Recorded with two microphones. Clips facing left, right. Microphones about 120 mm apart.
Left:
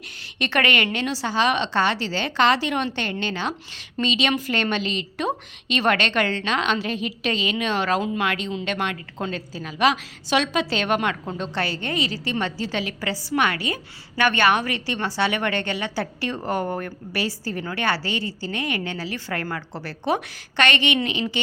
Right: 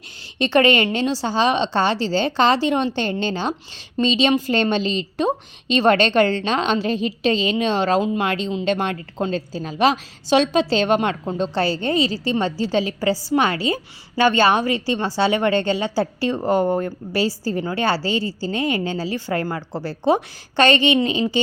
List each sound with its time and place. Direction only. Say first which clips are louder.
0.3 s a woman's voice: right 7 dB; 30° right (ahead or behind)